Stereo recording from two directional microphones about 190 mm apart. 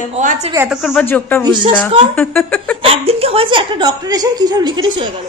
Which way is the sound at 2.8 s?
30° right (ahead or behind).